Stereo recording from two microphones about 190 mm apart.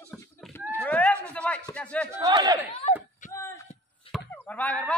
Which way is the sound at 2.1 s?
20° right (ahead or behind).